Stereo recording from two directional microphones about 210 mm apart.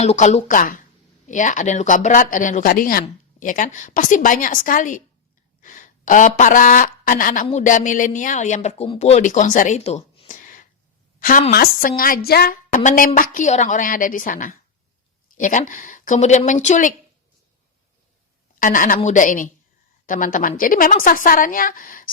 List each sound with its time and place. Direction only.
0.0 s a woman's voice: 35° left (ahead or behind)
18.6 s speech: 40° left (ahead or behind)